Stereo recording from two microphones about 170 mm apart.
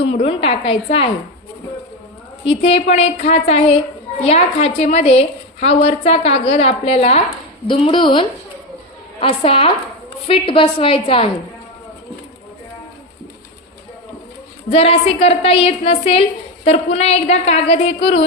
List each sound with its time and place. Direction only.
0.1 s a woman's voice: 35° left (ahead or behind)
2.4 s a woman's voice: 35° left (ahead or behind)
14.7 s a woman's voice: 35° left (ahead or behind)